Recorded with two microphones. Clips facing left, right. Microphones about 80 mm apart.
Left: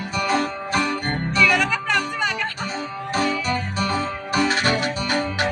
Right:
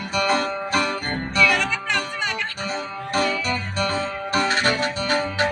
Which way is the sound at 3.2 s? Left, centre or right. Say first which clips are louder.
Even; centre.